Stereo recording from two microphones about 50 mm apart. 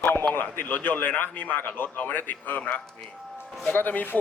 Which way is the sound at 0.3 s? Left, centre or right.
Left.